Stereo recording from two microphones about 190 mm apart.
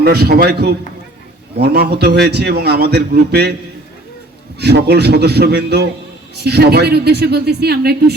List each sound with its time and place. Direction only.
0.0 s a man's voice: 55° right (ahead or behind)
4.6 s a man's voice: 60° right (ahead or behind)